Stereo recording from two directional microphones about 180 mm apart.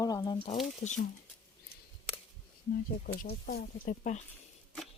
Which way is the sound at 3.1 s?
50° left (ahead or behind).